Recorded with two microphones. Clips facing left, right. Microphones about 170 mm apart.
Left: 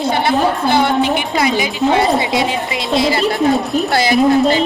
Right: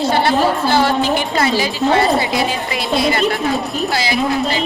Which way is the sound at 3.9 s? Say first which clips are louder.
Left 7 dB; 50° left (ahead or behind).